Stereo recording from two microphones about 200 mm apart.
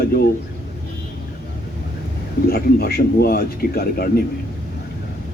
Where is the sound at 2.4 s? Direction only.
50° left (ahead or behind).